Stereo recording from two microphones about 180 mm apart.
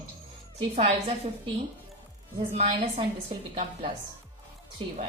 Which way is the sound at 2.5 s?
35° right (ahead or behind).